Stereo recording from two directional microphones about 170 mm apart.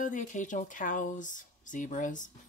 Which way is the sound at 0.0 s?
50° left (ahead or behind).